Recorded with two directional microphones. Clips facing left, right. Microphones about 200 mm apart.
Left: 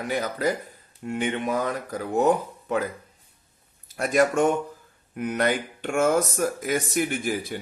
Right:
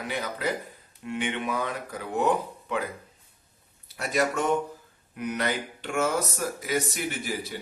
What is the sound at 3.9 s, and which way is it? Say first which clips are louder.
Speech: left 5 dB; 50° left (ahead or behind).